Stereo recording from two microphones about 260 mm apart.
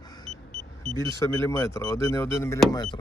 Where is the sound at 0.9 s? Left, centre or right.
Centre.